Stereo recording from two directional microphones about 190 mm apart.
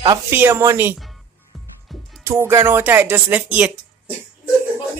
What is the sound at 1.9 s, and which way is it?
Music, centre (ahead or behind).